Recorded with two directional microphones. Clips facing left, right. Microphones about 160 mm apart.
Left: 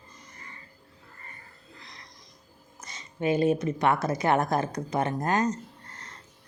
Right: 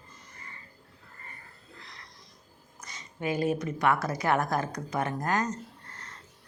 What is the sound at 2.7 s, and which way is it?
Speech, 25° left (ahead or behind).